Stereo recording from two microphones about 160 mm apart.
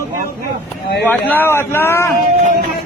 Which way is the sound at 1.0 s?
10° left (ahead or behind).